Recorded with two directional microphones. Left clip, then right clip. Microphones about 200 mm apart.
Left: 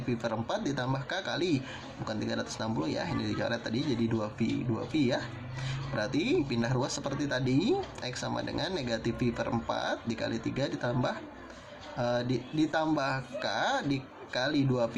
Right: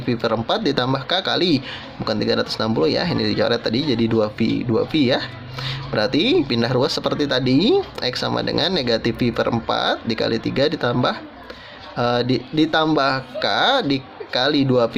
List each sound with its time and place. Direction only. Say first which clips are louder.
0.1 s speech: right 12 dB; 45° right (ahead or behind)